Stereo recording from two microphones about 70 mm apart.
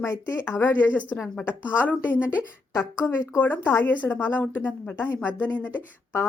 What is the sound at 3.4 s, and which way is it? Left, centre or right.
Speech, left.